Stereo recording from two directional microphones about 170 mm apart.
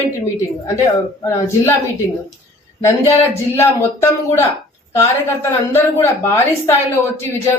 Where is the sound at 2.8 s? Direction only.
15° left (ahead or behind).